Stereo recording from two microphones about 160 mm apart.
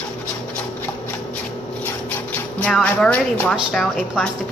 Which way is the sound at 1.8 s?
10° left (ahead or behind).